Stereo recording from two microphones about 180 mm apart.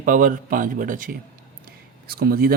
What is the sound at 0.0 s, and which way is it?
A man's voice, 50° right (ahead or behind).